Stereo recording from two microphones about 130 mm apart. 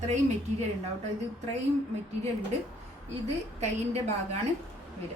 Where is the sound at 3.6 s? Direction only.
55° right (ahead or behind).